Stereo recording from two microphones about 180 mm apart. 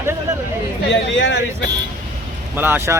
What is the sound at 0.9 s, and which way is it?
Speech, 85° left.